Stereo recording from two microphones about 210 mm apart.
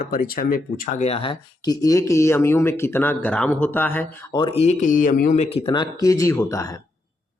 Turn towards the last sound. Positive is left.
turn(degrees=15)  # may be behind; listen again after turning